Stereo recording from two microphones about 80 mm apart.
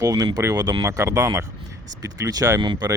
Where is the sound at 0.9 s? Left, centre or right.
Right.